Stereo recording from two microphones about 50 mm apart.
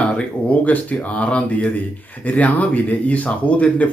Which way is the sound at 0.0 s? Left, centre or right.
Left.